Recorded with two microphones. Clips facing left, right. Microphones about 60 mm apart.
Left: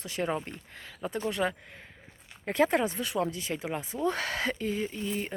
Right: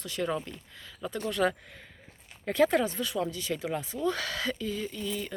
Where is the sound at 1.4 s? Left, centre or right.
Centre.